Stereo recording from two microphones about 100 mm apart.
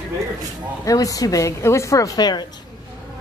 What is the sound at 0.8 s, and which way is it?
A woman's voice, 35° left (ahead or behind).